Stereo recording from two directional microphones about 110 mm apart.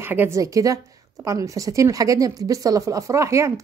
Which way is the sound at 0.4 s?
30° right (ahead or behind).